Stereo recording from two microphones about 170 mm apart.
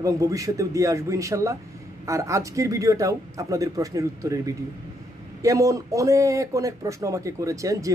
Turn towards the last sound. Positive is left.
turn(degrees=-20)  # may be behind; listen again after turning